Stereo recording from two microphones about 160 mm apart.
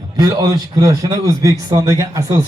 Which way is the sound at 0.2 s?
20° right (ahead or behind).